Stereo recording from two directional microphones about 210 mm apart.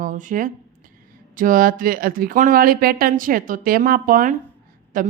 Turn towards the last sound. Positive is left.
turn(degrees=-40)  # may be behind; listen again after turning